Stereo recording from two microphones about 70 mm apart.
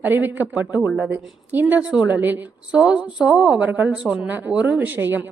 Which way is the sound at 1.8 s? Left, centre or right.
Centre.